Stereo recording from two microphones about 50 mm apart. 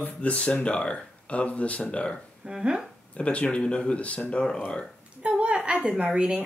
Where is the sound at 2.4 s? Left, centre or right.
Centre.